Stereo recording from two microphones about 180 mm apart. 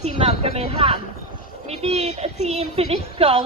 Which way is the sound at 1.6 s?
35° right (ahead or behind).